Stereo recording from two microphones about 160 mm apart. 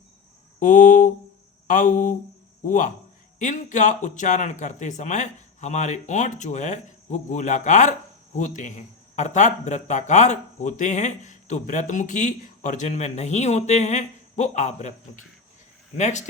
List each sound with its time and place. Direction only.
0.6 s speech: 55° left (ahead or behind)